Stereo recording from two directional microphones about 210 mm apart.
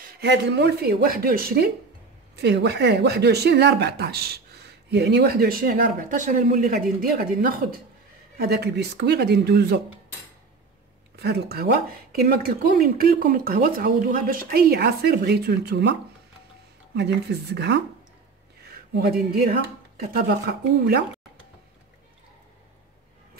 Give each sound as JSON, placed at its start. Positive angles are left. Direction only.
{"t": 0.0, "sound": "speech", "side_deg": -50}
{"t": 11.1, "sound": "speech", "side_deg": -50}
{"t": 18.6, "sound": "a sound", "side_deg": -50}
{"t": 20.1, "sound": "speech", "side_deg": -45}